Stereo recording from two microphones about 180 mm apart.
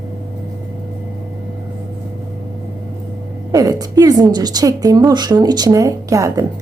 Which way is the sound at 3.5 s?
20° right (ahead or behind).